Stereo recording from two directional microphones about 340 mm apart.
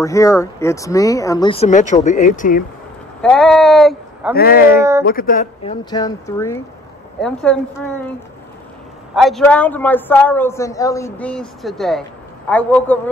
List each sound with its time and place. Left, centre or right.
0.0 s speech: centre
3.2 s a sound: centre
4.4 s a man's voice: left; by 7.5 s centre
9.1 s a man's voice: centre